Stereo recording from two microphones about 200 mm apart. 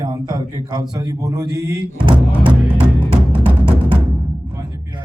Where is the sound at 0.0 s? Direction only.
20° right (ahead or behind).